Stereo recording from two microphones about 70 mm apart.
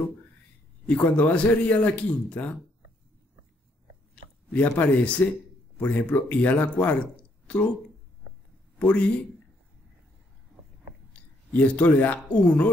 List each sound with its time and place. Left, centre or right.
0.8 s speech: left
4.1 s speech: centre
8.7 s a man's voice: centre
11.5 s speech: left